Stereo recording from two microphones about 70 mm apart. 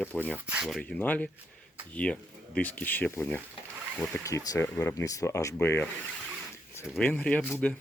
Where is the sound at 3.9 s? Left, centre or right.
Centre.